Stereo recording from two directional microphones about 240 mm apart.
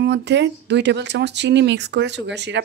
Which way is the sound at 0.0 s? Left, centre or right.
Right.